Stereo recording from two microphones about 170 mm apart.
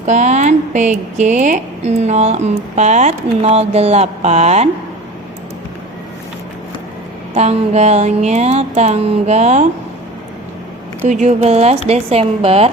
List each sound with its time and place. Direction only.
0.0 s speech: 45° right (ahead or behind)
7.3 s speech: 40° right (ahead or behind)
11.1 s speech: 45° right (ahead or behind)